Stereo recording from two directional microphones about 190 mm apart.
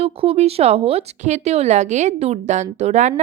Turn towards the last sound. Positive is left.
turn(degrees=-35)  # may be behind; listen again after turning